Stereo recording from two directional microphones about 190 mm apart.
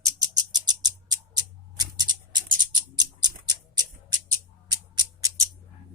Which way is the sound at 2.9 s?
20° right (ahead or behind).